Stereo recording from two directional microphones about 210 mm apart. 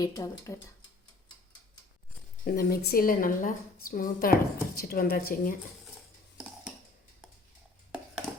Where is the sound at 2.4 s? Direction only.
50° left (ahead or behind).